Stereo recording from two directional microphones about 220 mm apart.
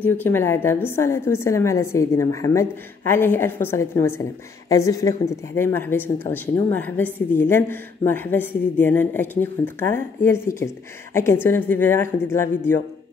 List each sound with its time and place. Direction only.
0.0 s speech: 10° left (ahead or behind)